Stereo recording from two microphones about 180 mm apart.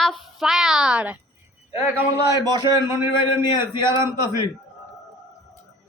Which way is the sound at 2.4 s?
20° right (ahead or behind).